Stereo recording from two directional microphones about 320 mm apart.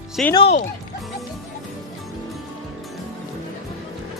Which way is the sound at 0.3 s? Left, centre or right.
Centre.